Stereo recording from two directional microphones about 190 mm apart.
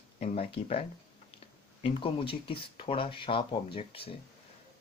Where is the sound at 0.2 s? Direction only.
30° left (ahead or behind).